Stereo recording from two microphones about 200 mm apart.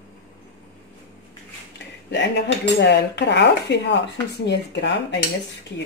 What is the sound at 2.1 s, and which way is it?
Speech, 60° left (ahead or behind).